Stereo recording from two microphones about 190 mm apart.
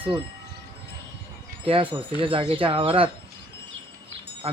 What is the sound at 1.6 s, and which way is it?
Speech, 30° right (ahead or behind).